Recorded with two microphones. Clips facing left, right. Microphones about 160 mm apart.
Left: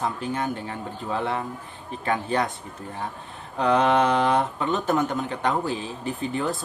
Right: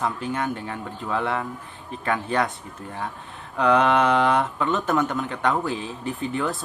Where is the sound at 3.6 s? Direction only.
35° left (ahead or behind).